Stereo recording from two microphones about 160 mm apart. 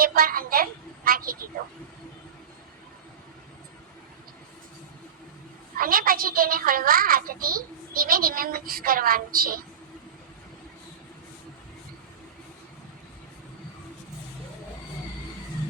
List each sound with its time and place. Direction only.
0.0 s a woman's voice: 65° right (ahead or behind)
5.7 s a woman's voice: 65° right (ahead or behind)